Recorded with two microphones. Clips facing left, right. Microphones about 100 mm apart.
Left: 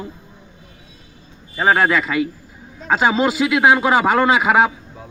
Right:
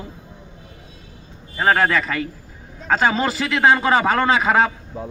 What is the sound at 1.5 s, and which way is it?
A man's voice, 15° left (ahead or behind).